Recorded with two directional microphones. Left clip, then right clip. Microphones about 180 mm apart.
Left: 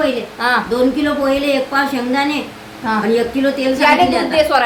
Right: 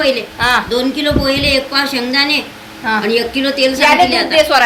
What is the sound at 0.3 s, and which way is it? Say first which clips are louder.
Speech: right 2 dB; 5° left (ahead or behind).